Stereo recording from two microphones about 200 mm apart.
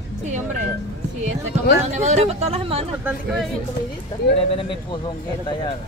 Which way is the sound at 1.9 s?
35° right (ahead or behind).